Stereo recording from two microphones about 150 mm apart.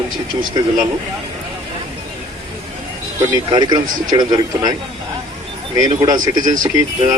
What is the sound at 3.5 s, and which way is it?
Speech, 30° right (ahead or behind).